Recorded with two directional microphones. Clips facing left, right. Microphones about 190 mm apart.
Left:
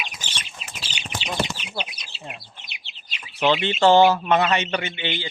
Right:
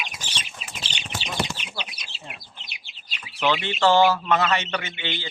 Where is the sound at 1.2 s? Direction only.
20° left (ahead or behind).